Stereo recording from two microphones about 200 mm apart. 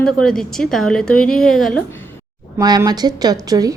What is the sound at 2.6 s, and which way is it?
A woman's voice, 20° right (ahead or behind).